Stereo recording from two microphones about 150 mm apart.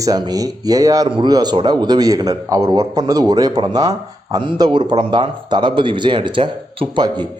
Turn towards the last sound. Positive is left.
turn(degrees=-30)  # may be behind; listen again after turning